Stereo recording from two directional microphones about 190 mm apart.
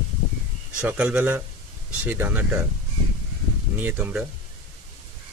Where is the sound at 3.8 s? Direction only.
10° right (ahead or behind).